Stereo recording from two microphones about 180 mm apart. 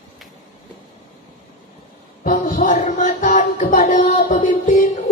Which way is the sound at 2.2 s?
45° left (ahead or behind).